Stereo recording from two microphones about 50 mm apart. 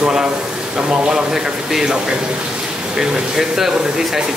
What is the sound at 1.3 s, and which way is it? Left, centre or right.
Speech, centre.